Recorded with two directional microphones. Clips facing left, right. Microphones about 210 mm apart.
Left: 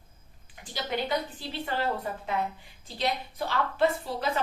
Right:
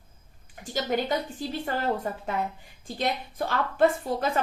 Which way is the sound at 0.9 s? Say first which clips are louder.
Right 2 dB; 45° right (ahead or behind).